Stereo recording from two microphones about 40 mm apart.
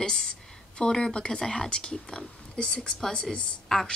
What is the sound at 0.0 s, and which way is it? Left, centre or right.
A woman's voice, left.